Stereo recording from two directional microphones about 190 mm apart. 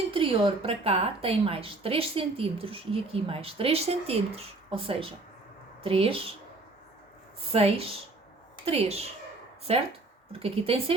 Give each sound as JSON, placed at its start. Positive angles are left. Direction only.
{"t": 0.1, "sound": "speech", "side_deg": -30}
{"t": 7.5, "sound": "a woman's voice", "side_deg": -30}